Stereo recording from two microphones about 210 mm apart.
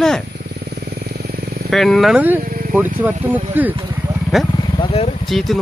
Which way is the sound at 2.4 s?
40° right (ahead or behind).